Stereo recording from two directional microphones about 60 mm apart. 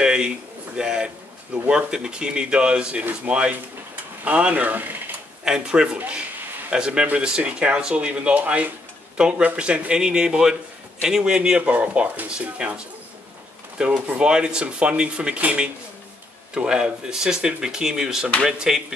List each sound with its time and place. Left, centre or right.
0.0 s a sound: centre
1.7 s speech: centre; by 5.1 s right
5.4 s speech: centre